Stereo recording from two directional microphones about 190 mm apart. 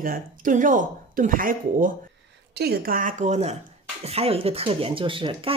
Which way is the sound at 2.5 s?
55° right (ahead or behind).